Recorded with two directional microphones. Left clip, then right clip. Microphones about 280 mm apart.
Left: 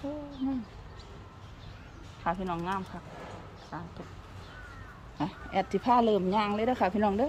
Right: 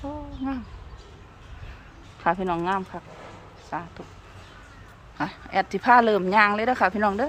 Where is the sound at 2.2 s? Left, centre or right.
Centre.